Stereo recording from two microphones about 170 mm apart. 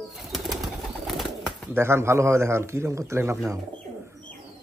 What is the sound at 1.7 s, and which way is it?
A man's voice, 15° right (ahead or behind).